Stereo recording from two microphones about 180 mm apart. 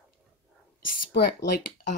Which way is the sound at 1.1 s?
60° left (ahead or behind).